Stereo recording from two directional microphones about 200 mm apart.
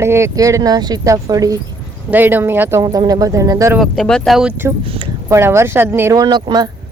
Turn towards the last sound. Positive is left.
turn(degrees=-20)  # may be behind; listen again after turning